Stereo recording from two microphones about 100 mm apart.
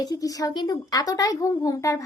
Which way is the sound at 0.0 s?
40° left (ahead or behind).